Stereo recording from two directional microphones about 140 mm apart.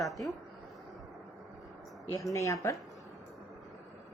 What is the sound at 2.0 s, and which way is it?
Speech, 20° left (ahead or behind).